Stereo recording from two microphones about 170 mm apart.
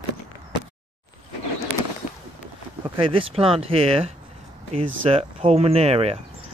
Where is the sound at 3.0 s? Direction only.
30° right (ahead or behind).